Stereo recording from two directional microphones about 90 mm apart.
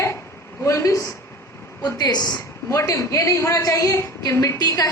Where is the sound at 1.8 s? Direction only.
45° left (ahead or behind).